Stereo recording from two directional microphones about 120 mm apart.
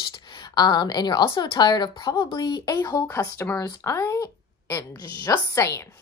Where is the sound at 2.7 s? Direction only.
25° left (ahead or behind).